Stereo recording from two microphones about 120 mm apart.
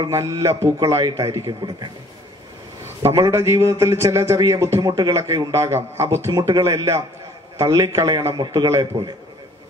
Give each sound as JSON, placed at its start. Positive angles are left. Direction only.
{"t": 0.1, "sound": "speech", "side_deg": -25}
{"t": 3.0, "sound": "speech", "side_deg": -25}